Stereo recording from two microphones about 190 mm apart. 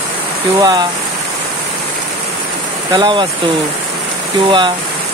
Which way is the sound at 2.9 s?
20° right (ahead or behind).